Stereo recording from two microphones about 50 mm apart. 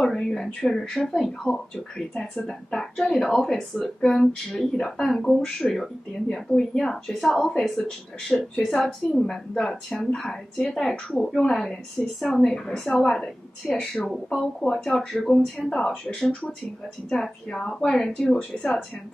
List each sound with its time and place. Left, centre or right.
0.0 s a woman's voice: centre
6.8 s a woman's voice: centre
16.2 s speech: left
17.1 s speech: centre